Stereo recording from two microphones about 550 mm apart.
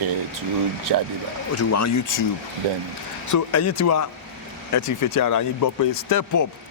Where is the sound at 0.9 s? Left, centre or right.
Right.